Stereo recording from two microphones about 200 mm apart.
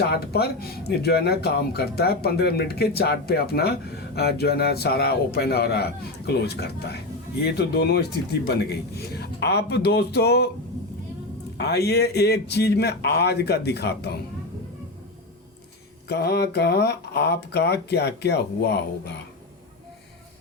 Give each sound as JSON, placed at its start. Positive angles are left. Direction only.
{"t": 0.0, "sound": "speech", "side_deg": 50}
{"t": 11.5, "sound": "speech", "side_deg": 55}
{"t": 16.0, "sound": "speech", "side_deg": 55}